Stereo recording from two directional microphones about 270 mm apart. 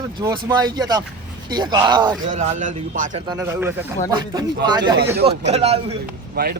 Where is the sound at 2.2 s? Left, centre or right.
Right.